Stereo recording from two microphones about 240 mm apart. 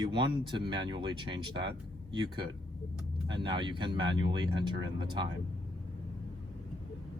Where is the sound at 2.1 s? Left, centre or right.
Centre.